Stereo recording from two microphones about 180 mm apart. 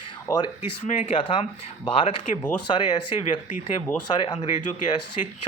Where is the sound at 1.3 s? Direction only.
30° left (ahead or behind).